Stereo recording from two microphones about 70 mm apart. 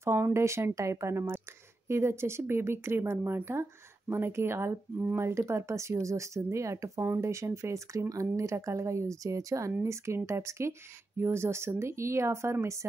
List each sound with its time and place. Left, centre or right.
0.0 s speech: right